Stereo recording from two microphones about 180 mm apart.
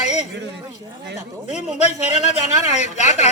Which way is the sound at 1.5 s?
40° left (ahead or behind).